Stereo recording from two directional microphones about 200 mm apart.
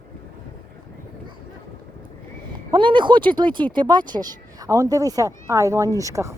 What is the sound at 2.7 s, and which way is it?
Speech, 25° right (ahead or behind).